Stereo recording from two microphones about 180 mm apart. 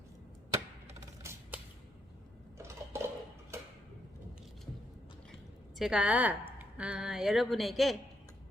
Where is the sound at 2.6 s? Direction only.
15° right (ahead or behind).